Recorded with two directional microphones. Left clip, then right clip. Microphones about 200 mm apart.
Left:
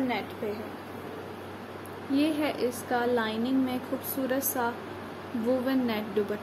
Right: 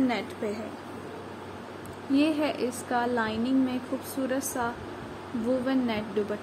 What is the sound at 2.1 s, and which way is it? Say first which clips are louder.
A woman's voice: right 2 dB; 20° right (ahead or behind).